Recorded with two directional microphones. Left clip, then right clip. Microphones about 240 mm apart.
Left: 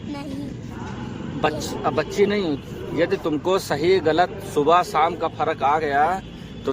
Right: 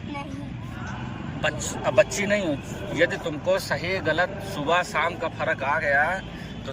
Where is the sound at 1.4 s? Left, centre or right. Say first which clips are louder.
Left 4 dB; left.